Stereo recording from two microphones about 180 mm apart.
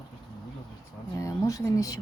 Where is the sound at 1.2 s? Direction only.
20° left (ahead or behind).